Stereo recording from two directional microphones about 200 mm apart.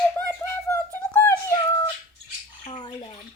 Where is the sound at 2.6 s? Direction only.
25° left (ahead or behind).